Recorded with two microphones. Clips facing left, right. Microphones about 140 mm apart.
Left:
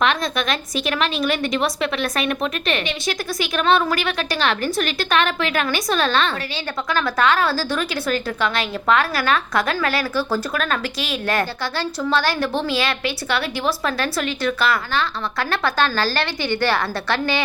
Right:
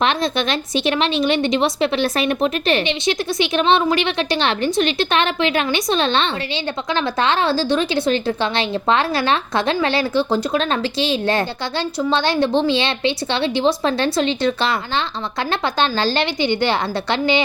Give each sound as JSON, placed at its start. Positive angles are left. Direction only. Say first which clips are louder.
{"t": 0.0, "sound": "a woman's voice", "louder": "right 2 dB", "side_deg": -30}